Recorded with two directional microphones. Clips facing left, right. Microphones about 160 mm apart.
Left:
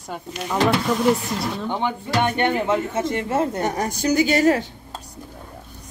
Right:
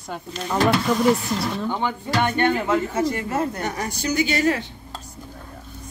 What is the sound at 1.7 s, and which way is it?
Speech, 20° left (ahead or behind).